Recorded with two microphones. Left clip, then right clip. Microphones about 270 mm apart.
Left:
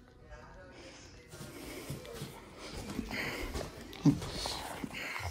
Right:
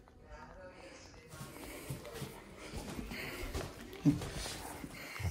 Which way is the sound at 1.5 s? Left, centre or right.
Centre.